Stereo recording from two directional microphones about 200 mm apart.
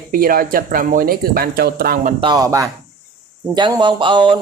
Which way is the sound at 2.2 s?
20° right (ahead or behind).